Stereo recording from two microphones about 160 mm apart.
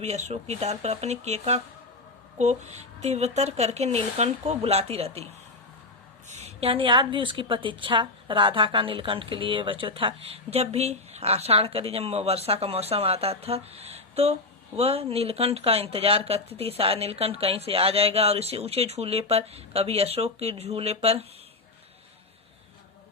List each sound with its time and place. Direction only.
0.0 s a woman's voice: 45° right (ahead or behind)